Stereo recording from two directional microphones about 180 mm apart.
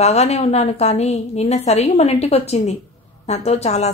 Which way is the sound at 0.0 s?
35° left (ahead or behind).